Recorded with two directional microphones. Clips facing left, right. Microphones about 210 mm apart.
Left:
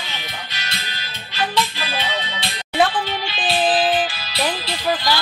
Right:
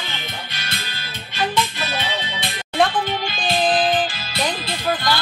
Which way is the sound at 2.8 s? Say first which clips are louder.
Even; 5° left (ahead or behind).